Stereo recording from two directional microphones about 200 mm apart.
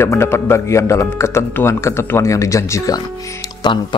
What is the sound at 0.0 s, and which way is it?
Speech, 10° left (ahead or behind).